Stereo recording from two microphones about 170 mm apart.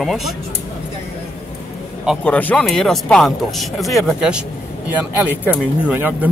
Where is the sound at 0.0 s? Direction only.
Centre (ahead or behind).